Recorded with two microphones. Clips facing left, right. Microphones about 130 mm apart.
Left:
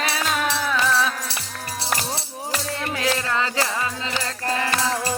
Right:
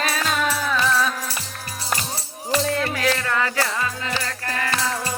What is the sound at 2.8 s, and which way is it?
Music, 20° left (ahead or behind).